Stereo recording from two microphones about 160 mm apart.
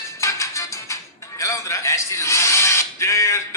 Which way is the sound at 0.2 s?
20° left (ahead or behind).